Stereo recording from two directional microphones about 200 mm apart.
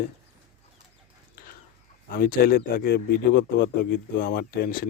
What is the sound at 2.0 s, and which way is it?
Speech, 45° left (ahead or behind).